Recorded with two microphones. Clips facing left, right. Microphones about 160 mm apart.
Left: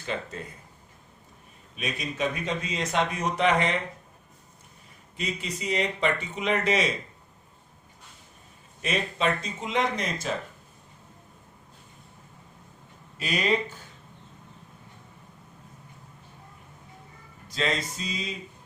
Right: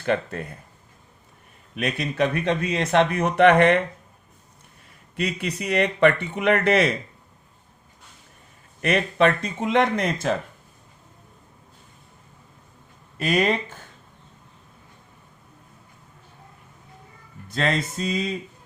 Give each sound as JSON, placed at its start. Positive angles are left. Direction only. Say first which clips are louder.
{"t": 0.0, "sound": "speech", "louder": "right 9 dB", "side_deg": -60}
{"t": 1.7, "sound": "speech", "louder": "right 6 dB", "side_deg": -65}
{"t": 5.1, "sound": "speech", "louder": "right 6 dB", "side_deg": -65}
{"t": 8.8, "sound": "speech", "louder": "right 7 dB", "side_deg": -60}
{"t": 13.1, "sound": "music", "louder": "right 5 dB", "side_deg": -55}
{"t": 17.5, "sound": "music", "louder": "right 4 dB", "side_deg": -50}